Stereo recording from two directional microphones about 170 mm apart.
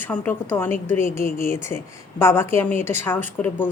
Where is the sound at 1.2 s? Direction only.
55° left (ahead or behind).